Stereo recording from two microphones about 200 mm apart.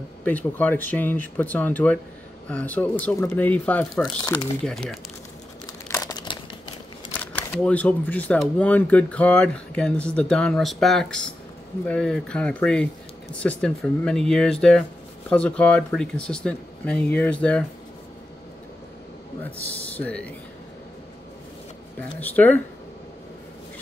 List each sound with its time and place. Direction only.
0.2 s speech: 10° left (ahead or behind)
6.0 s crumpling: 20° left (ahead or behind)
7.2 s speech: 10° left (ahead or behind)
19.6 s speech: 5° left (ahead or behind)
22.2 s speech: 10° left (ahead or behind)